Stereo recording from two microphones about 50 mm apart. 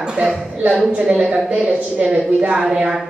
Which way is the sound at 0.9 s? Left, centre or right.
Centre.